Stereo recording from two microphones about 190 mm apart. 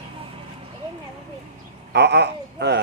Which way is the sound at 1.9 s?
65° right (ahead or behind).